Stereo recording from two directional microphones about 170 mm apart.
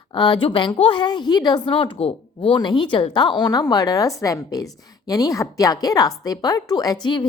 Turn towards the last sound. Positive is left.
turn(degrees=25)  # may be behind; listen again after turning